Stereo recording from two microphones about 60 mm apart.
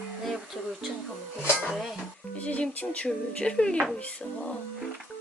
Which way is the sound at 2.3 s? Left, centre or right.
Left.